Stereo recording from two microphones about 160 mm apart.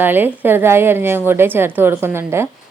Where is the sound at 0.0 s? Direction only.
10° right (ahead or behind).